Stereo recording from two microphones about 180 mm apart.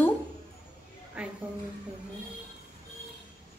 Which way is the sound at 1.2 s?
5° right (ahead or behind).